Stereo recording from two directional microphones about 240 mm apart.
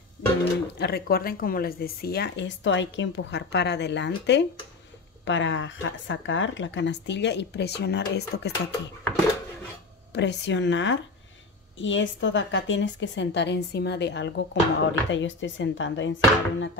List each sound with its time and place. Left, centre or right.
0.7 s a woman's voice: left
10.1 s a woman's voice: left